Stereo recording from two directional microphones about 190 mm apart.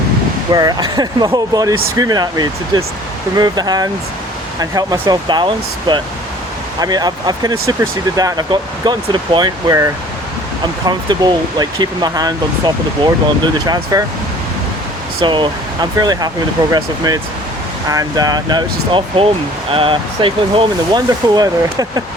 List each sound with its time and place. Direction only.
0.5 s speech: 20° right (ahead or behind)
15.2 s speech: 25° right (ahead or behind)